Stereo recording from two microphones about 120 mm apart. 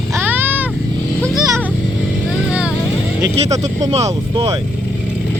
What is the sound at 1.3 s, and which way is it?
Speech, 30° right (ahead or behind).